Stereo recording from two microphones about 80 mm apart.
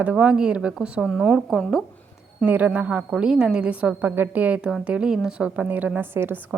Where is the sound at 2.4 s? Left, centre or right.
Right.